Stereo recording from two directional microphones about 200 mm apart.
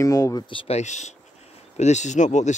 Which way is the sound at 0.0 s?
15° left (ahead or behind).